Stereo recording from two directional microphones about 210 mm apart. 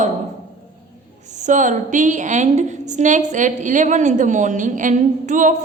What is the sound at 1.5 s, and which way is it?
A woman's voice, 35° right (ahead or behind).